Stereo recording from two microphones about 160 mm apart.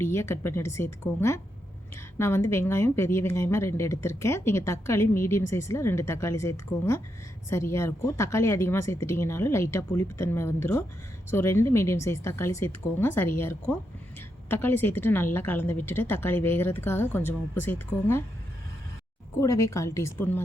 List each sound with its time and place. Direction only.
0.0 s speech: 15° left (ahead or behind)
19.4 s a woman's voice: 20° left (ahead or behind)